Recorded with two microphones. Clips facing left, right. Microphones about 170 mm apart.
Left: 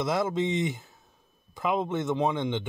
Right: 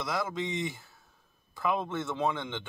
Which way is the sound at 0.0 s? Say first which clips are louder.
Left 6 dB; 25° left (ahead or behind).